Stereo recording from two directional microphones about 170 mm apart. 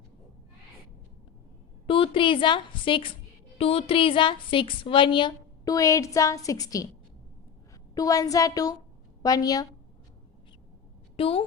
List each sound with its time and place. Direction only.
1.9 s a woman's voice: 30° left (ahead or behind)
7.9 s a woman's voice: 20° left (ahead or behind)
11.2 s a woman's voice: 35° left (ahead or behind)